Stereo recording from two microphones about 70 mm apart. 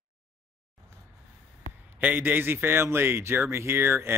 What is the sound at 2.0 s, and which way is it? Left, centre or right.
Speech, right.